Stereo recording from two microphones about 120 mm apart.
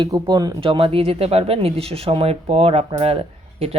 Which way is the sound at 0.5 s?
50° right (ahead or behind).